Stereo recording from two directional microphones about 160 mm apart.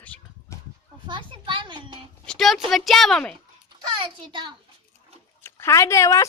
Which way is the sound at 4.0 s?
30° right (ahead or behind).